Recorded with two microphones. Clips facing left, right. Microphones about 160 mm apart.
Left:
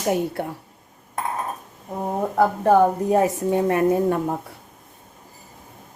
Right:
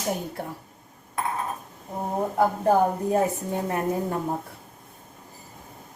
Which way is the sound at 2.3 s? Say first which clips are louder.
Left 4 dB; 80° left.